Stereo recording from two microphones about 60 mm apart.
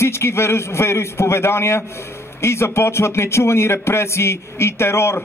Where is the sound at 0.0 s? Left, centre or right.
Left.